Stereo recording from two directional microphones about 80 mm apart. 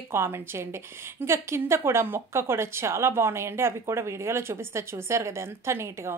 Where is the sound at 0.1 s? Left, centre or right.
Right.